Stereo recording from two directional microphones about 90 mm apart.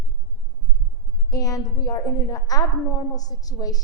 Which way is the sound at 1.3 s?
40° left (ahead or behind).